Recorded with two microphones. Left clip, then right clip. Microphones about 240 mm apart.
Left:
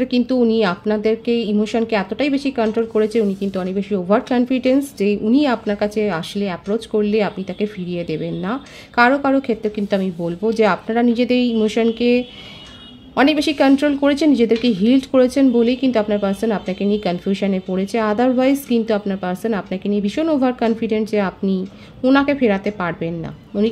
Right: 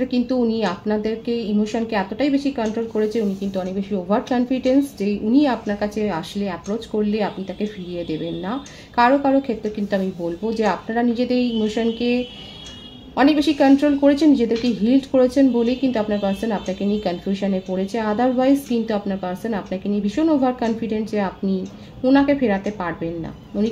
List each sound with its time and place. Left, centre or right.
0.0 s speech: left